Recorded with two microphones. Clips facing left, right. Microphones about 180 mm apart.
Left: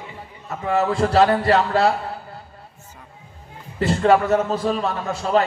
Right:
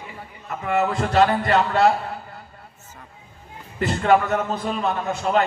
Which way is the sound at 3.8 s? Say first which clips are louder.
Left 2 dB; 30° left (ahead or behind).